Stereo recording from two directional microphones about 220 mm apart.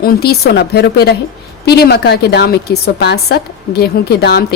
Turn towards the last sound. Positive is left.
turn(degrees=50)  # may be behind; listen again after turning